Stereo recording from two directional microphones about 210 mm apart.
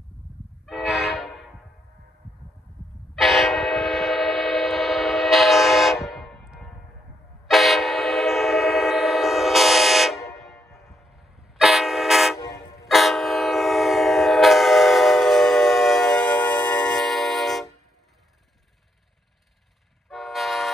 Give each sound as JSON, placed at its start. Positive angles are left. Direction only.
{"t": 0.7, "sound": "train", "side_deg": 0}
{"t": 3.2, "sound": "train", "side_deg": 0}
{"t": 10.3, "sound": "a sound", "side_deg": 0}
{"t": 11.5, "sound": "toot", "side_deg": 0}
{"t": 12.4, "sound": "toot", "side_deg": 50}
{"t": 12.8, "sound": "train", "side_deg": 0}
{"t": 20.1, "sound": "vehicle", "side_deg": 0}